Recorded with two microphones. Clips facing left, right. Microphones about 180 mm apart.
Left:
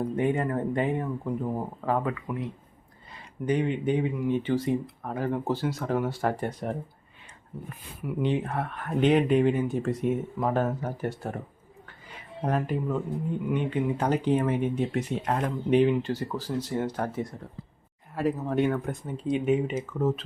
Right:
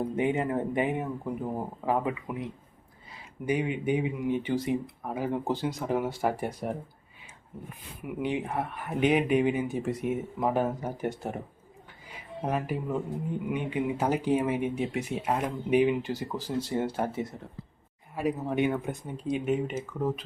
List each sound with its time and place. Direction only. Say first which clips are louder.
0.2 s speech: left 1 dB; 15° right (ahead or behind)
16.6 s speech: right 1 dB; 30° right (ahead or behind)
18.1 s speech: left 2 dB; centre (ahead or behind)